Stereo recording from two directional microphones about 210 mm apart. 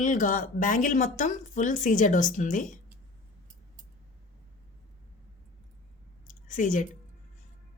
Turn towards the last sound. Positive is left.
turn(degrees=40)  # may be behind; listen again after turning